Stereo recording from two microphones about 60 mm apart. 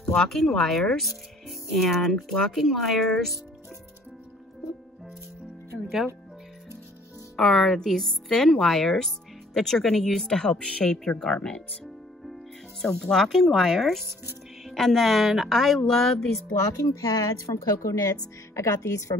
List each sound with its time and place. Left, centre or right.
0.0 s speech: centre
7.3 s a woman's voice: centre
16.7 s a woman's voice: left
18.5 s speech: left